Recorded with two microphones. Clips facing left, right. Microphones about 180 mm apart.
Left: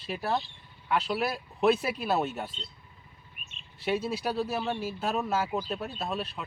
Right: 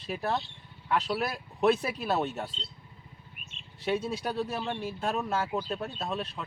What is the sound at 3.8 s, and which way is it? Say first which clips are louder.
Speech: left 1 dB; 5° left (ahead or behind).